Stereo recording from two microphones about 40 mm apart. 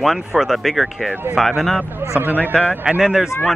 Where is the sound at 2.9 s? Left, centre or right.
Right.